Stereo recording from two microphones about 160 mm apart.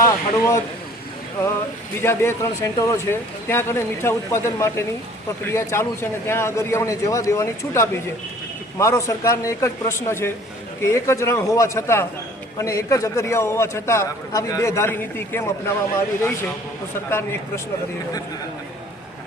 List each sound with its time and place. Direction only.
0.0 s speech: 20° left (ahead or behind)
2.0 s a man's voice: 15° left (ahead or behind)